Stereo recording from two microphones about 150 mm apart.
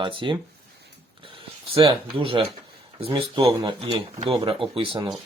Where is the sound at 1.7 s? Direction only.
35° right (ahead or behind).